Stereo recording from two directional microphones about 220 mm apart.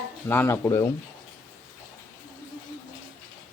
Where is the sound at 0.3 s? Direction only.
10° left (ahead or behind).